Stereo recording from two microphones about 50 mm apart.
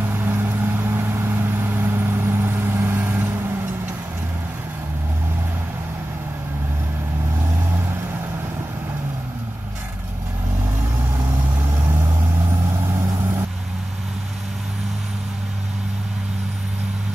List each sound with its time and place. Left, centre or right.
0.0 s vehicle: right